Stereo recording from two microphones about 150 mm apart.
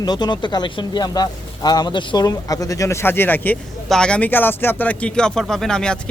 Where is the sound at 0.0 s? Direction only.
30° left (ahead or behind).